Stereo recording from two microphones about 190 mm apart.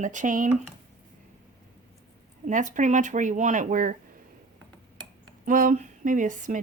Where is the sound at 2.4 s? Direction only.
40° right (ahead or behind).